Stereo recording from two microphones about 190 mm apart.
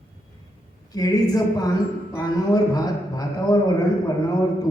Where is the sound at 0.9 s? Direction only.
20° left (ahead or behind).